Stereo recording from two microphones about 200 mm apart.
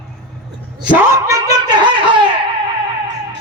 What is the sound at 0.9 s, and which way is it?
Speech, 15° right (ahead or behind).